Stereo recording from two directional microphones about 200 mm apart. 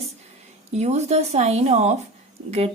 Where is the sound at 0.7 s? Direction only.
35° right (ahead or behind).